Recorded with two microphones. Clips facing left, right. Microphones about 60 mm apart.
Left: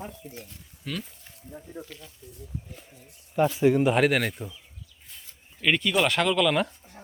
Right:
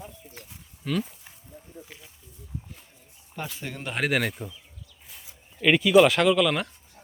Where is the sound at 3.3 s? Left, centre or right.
Centre.